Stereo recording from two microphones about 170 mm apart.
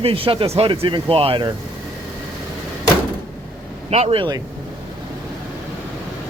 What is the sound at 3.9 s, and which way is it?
Speech, 35° right (ahead or behind).